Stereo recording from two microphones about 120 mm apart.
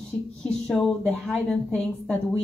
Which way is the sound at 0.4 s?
5° left (ahead or behind).